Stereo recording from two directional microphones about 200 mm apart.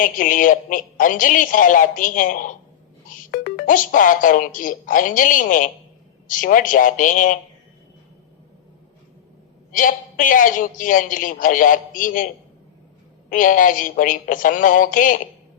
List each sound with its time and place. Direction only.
0.0 s a man's voice: 40° left (ahead or behind)
9.7 s a man's voice: 40° left (ahead or behind)
13.3 s a man's voice: 40° left (ahead or behind)